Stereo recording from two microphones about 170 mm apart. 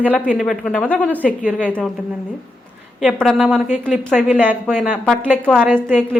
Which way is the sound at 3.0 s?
Centre (ahead or behind).